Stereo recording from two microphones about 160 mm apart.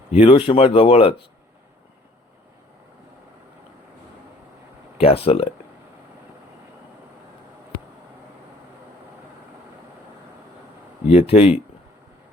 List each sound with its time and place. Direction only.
0.1 s speech: 35° left (ahead or behind)
4.9 s speech: 35° left (ahead or behind)
11.1 s speech: 40° left (ahead or behind)